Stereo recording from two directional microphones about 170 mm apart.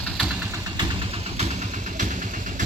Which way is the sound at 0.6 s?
30° right (ahead or behind).